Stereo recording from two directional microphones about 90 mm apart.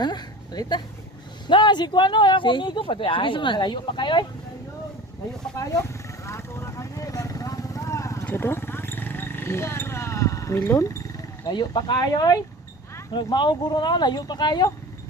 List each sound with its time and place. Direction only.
0.0 s speech: 50° left (ahead or behind)
1.5 s speech: 60° left (ahead or behind)
6.2 s vehicle: 30° left (ahead or behind)
8.2 s a sound: 20° left (ahead or behind)
11.4 s speech: 55° left (ahead or behind)
13.1 s speech: 55° left (ahead or behind)